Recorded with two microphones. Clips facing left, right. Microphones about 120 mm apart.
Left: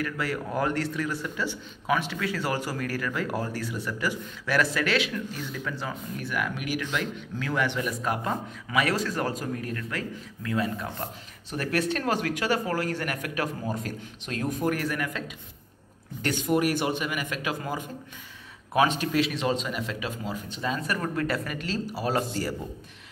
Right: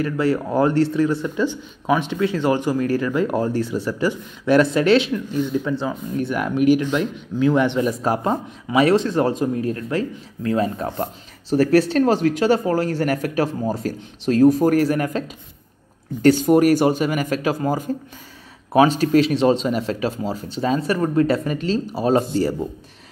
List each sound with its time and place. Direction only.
0.0 s speech: 30° right (ahead or behind)